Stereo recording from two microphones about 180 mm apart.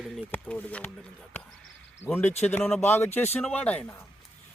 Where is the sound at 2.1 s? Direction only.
10° left (ahead or behind).